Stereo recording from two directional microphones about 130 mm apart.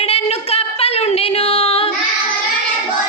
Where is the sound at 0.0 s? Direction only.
50° left (ahead or behind).